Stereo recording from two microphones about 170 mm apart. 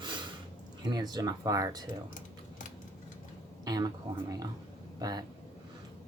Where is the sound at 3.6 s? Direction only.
20° right (ahead or behind).